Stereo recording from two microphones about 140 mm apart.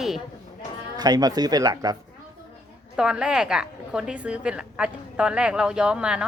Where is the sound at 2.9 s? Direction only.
5° right (ahead or behind).